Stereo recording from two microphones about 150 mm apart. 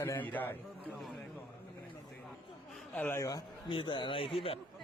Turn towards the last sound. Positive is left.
turn(degrees=40)  # may be behind; listen again after turning